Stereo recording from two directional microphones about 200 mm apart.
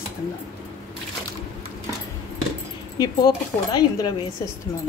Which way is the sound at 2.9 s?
20° left (ahead or behind).